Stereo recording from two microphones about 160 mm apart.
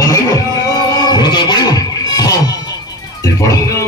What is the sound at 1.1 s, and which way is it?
Music, 30° left (ahead or behind).